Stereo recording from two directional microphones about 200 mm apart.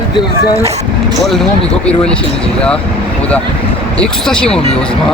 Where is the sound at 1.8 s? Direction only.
5° left (ahead or behind).